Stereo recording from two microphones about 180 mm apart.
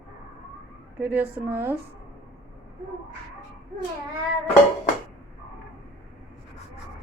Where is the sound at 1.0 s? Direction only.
10° right (ahead or behind).